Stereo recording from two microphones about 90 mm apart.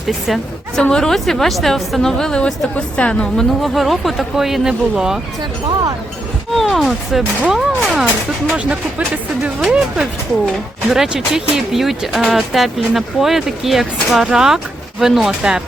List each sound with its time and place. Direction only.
0.8 s a woman's voice: 5° left (ahead or behind)
6.5 s a woman's voice: centre (ahead or behind)
7.4 s speech: 15° right (ahead or behind)
7.8 s a woman's voice: 5° right (ahead or behind)